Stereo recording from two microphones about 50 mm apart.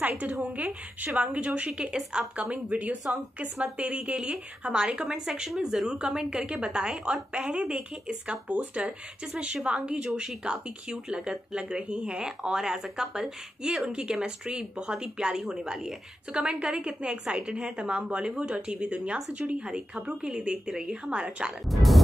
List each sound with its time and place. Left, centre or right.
0.2 s a woman's voice: right; by 2.4 s centre
2.4 s a woman's voice: right; by 15.9 s centre
16.3 s a woman's voice: right
21.6 s speech: centre